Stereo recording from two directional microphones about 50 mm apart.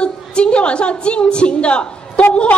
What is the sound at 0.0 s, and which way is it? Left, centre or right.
A woman's voice, left.